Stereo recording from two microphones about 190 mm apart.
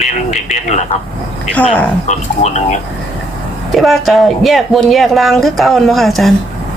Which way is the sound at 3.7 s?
Centre (ahead or behind).